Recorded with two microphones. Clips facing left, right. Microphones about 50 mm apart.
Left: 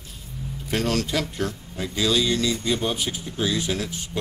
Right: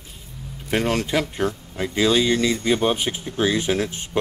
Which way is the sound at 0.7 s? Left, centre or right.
Right.